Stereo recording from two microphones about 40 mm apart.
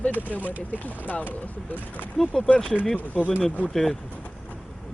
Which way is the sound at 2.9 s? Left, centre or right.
Left.